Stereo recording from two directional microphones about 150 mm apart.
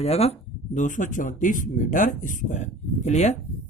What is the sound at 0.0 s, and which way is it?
Speech, 45° left (ahead or behind).